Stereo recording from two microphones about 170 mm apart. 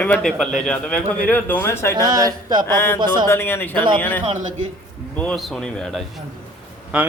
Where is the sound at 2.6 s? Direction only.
15° left (ahead or behind).